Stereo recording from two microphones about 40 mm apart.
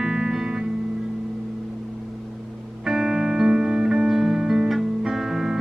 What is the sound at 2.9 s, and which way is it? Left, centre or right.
Music, centre.